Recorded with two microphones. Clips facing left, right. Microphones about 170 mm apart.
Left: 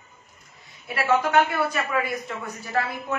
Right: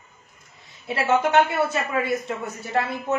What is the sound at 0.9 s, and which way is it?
A man's voice, 25° right (ahead or behind).